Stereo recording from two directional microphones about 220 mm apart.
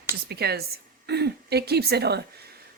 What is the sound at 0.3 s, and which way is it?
Speech, 45° right (ahead or behind).